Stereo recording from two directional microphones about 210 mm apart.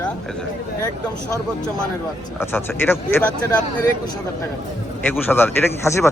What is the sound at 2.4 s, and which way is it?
Speech, 10° left (ahead or behind).